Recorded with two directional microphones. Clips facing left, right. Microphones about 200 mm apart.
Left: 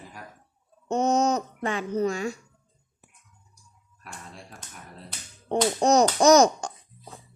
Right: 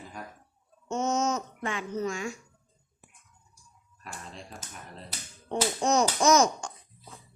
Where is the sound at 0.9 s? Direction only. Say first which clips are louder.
Left 5 dB; 35° left (ahead or behind).